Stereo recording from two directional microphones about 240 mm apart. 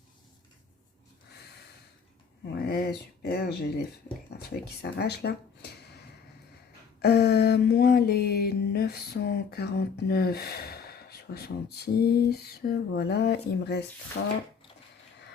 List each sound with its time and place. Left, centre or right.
2.5 s speech: left
7.0 s music: left
14.2 s speech: left